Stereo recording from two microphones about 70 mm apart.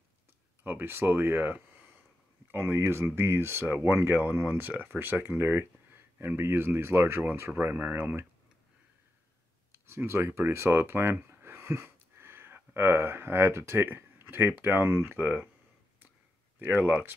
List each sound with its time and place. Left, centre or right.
0.7 s speech: right
2.5 s speech: right
9.7 s speech: right
16.5 s speech: right